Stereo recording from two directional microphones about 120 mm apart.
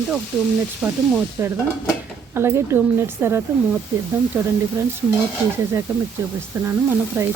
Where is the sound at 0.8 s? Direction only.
10° right (ahead or behind).